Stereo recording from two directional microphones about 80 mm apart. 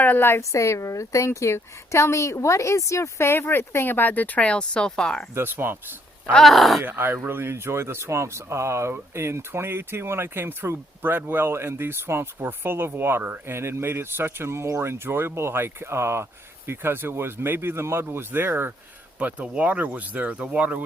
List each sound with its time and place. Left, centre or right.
0.0 s a woman's voice: left
5.3 s speech: right
6.3 s groan: centre
6.8 s speech: right